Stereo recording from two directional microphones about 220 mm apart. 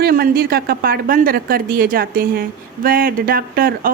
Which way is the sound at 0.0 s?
45° right (ahead or behind).